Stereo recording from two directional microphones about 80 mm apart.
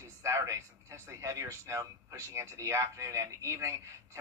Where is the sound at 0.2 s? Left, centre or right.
Right.